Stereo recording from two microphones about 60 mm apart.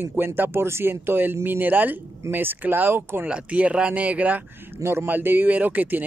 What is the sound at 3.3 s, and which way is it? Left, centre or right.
Speech, right.